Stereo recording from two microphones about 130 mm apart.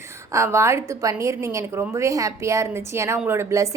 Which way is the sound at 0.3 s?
20° right (ahead or behind).